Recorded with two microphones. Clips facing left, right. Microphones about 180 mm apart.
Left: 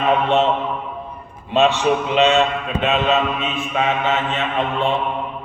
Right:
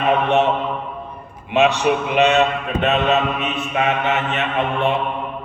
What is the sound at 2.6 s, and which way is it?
Mantra, 60° right (ahead or behind).